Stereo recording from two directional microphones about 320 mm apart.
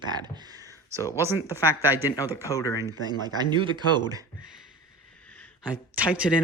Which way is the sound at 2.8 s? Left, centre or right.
Centre.